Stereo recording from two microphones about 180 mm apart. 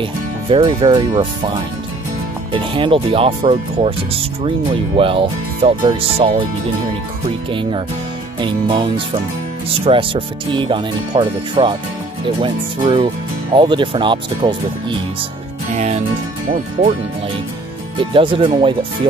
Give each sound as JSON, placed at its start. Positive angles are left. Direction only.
{"t": 0.0, "sound": "speech", "side_deg": -30}
{"t": 2.5, "sound": "speech", "side_deg": -30}
{"t": 8.4, "sound": "speech", "side_deg": -30}
{"t": 15.7, "sound": "speech", "side_deg": -35}
{"t": 18.1, "sound": "speech", "side_deg": -30}